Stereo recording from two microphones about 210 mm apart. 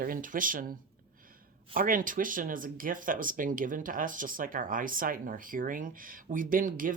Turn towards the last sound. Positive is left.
turn(degrees=-40)  # may be behind; listen again after turning